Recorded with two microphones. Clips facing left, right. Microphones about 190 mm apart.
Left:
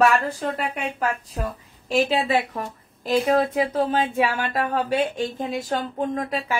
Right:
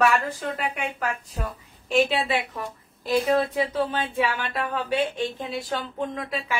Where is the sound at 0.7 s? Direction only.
35° left (ahead or behind).